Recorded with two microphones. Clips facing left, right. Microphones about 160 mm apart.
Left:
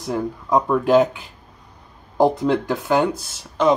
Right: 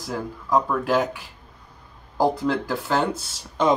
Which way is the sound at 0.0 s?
20° left (ahead or behind).